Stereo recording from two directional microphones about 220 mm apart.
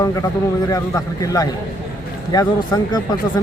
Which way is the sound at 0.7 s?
15° left (ahead or behind).